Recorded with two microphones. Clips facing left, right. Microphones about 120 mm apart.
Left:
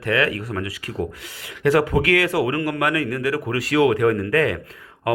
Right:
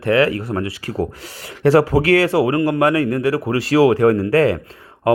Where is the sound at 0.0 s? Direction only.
30° right (ahead or behind).